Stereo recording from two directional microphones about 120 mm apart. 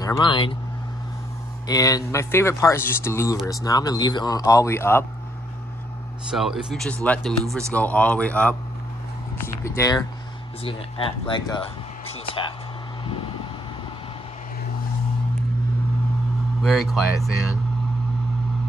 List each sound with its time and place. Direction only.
0.2 s speech: 45° left (ahead or behind)
1.7 s speech: 30° left (ahead or behind)
6.3 s speech: 5° right (ahead or behind)
9.7 s speech: 25° left (ahead or behind)
10.6 s speech: 50° left (ahead or behind)
11.6 s a sound: 50° left (ahead or behind)
16.6 s speech: centre (ahead or behind)